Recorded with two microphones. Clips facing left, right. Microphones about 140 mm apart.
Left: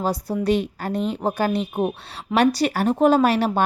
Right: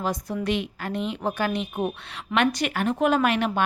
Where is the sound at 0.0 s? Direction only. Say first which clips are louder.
Left 4 dB; 35° left (ahead or behind).